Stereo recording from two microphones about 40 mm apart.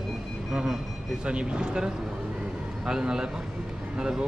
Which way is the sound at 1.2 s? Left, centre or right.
Right.